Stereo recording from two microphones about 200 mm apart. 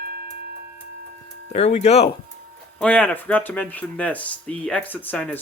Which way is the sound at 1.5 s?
35° left (ahead or behind).